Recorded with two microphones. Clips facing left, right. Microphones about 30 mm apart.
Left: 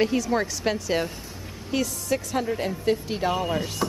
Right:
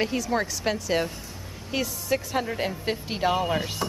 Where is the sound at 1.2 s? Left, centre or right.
Centre.